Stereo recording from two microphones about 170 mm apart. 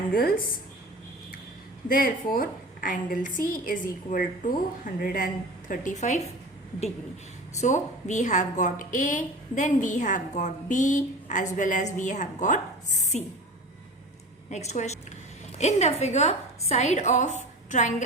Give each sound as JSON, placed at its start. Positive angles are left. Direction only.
{"t": 0.1, "sound": "a woman's voice", "side_deg": 60}
{"t": 1.9, "sound": "a woman's voice", "side_deg": 55}
{"t": 7.6, "sound": "a woman's voice", "side_deg": 45}
{"t": 14.5, "sound": "a woman's voice", "side_deg": 40}